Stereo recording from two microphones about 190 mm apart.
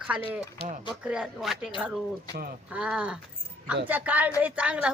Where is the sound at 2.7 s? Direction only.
5° right (ahead or behind).